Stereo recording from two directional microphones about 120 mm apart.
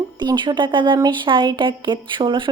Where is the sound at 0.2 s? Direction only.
40° right (ahead or behind).